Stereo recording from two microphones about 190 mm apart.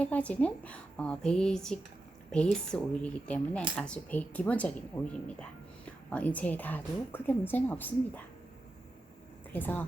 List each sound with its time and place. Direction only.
0.0 s a woman's voice: 5° left (ahead or behind)
9.5 s a woman's voice: 10° left (ahead or behind)